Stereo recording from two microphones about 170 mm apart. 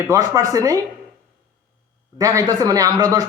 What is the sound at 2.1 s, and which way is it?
Speech, 20° right (ahead or behind).